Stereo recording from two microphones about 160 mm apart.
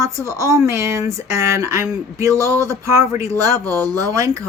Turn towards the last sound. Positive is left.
turn(degrees=-20)  # may be behind; listen again after turning